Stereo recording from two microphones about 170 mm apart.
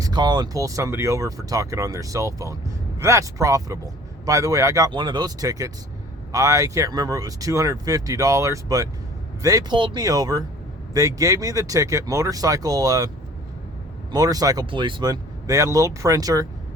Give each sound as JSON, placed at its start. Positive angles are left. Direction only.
{"t": 0.0, "sound": "speech", "side_deg": -25}
{"t": 14.1, "sound": "speech", "side_deg": -20}